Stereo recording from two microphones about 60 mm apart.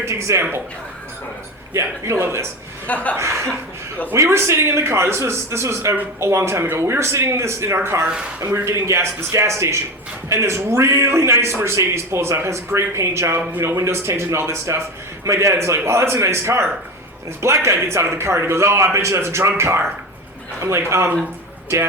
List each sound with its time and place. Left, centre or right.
0.0 s a man's voice: right
1.7 s a man's voice: right
2.8 s speech: left
3.2 s a man's voice: right
8.0 s speech: centre
8.6 s a man's voice: right